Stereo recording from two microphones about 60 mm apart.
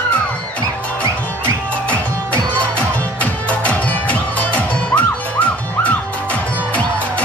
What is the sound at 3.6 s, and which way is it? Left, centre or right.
Music, left.